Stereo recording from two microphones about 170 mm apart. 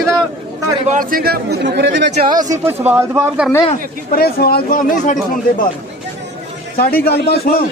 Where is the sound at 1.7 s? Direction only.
90° right.